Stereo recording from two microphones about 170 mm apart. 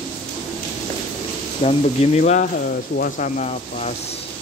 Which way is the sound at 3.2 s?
40° left (ahead or behind).